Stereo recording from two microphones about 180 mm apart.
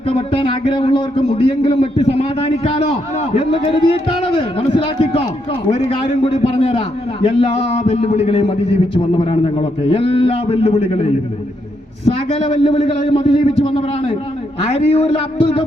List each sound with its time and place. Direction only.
0.1 s a man's voice: 30° left (ahead or behind)
12.0 s a man's voice: 35° left (ahead or behind)